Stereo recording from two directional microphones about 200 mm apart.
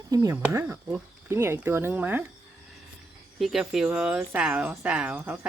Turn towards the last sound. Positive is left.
turn(degrees=-5)  # may be behind; listen again after turning